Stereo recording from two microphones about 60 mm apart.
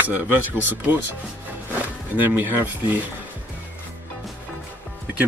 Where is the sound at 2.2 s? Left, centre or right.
Right.